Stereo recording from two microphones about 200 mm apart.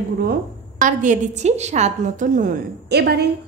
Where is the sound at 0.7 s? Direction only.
40° right (ahead or behind).